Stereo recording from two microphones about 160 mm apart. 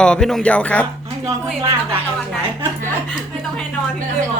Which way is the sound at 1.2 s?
20° right (ahead or behind).